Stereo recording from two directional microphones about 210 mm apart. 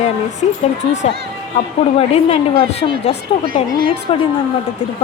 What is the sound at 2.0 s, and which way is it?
Speech, 30° left (ahead or behind).